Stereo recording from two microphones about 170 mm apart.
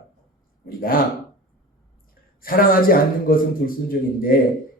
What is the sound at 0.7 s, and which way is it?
Speech, 60° left (ahead or behind).